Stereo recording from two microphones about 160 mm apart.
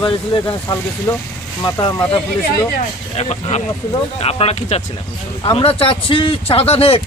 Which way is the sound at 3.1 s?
40° left (ahead or behind).